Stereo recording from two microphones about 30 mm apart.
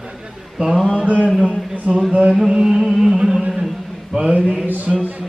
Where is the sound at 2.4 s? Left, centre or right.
Centre.